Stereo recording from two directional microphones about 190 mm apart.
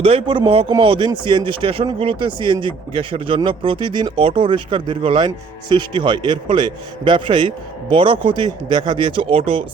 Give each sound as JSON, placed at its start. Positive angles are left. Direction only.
{"t": 0.0, "sound": "a man's voice", "side_deg": -30}